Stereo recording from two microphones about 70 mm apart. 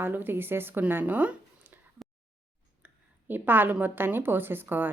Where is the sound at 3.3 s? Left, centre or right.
Right.